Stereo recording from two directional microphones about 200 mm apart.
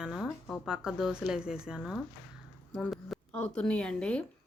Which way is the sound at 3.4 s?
5° left (ahead or behind).